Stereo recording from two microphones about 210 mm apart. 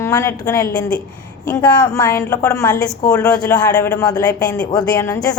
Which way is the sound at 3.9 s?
15° left (ahead or behind).